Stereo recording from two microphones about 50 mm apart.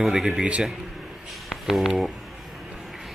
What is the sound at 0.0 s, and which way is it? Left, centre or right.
Speech, centre.